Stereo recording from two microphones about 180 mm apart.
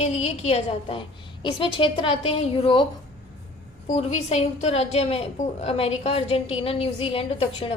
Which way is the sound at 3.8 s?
40° left (ahead or behind).